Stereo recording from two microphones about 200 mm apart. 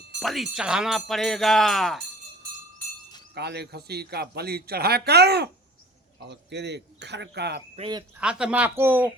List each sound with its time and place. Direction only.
0.2 s speech: centre (ahead or behind)
3.3 s a man's voice: 55° right (ahead or behind)
7.8 s speech: 20° right (ahead or behind)
8.2 s speech: 5° right (ahead or behind)